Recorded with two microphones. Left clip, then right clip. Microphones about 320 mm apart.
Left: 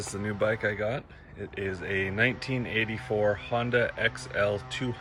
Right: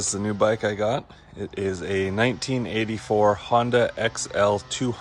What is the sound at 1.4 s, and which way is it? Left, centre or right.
Speech, right.